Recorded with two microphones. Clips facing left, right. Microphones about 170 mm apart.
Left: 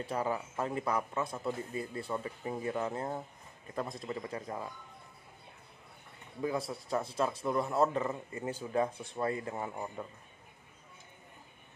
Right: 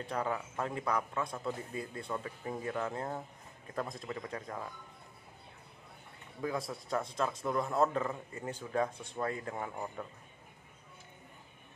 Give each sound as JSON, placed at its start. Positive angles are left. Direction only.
{"t": 0.0, "sound": "a man's voice", "side_deg": 5}
{"t": 6.4, "sound": "a man's voice", "side_deg": 5}